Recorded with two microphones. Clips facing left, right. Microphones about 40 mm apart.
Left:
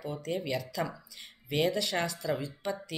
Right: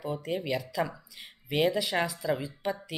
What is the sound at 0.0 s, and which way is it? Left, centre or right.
Speech, centre.